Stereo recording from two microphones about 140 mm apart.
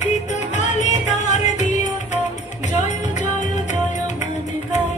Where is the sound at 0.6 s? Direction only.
60° left (ahead or behind).